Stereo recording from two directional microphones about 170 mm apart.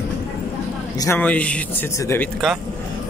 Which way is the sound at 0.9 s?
20° left (ahead or behind).